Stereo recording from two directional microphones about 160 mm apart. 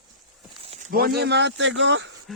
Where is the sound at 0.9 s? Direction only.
70° right (ahead or behind); by 1.6 s 90° right.